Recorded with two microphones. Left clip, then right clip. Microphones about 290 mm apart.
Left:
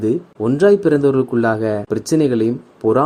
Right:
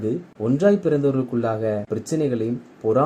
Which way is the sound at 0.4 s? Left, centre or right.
Left.